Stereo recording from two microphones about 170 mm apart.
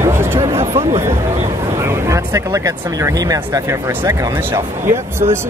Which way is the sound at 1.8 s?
15° right (ahead or behind).